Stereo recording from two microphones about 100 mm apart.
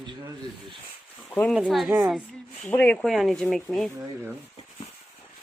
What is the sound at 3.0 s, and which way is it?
Speech, centre (ahead or behind).